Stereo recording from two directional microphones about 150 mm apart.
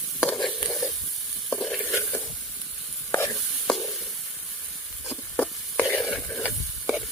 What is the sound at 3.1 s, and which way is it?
Stir, 20° left (ahead or behind).